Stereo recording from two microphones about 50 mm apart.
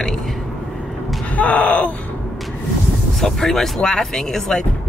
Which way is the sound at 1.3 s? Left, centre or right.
Left.